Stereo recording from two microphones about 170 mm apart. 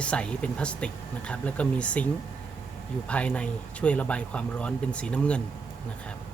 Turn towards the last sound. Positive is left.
turn(degrees=5)  # may be behind; listen again after turning